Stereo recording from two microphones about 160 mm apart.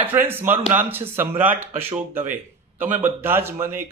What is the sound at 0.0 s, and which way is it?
A man's voice, 15° right (ahead or behind).